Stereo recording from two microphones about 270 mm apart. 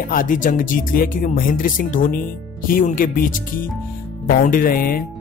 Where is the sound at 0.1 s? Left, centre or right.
Left.